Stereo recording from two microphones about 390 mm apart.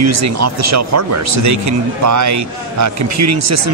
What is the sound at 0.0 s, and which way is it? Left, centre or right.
Speech, right.